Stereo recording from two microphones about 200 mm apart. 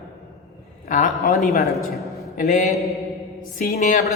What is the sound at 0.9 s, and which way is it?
Speech, 40° left (ahead or behind).